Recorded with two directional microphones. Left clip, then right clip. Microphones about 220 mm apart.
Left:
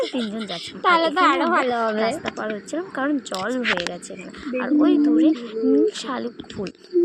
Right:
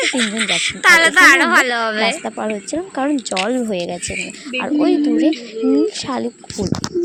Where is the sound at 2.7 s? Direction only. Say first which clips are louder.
Right 4 dB; 35° right (ahead or behind).